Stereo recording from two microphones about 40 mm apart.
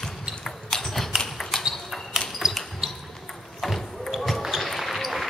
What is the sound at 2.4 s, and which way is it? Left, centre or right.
Basketball bounce, centre.